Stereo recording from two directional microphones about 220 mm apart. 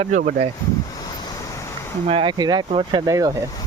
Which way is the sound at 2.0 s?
25° right (ahead or behind).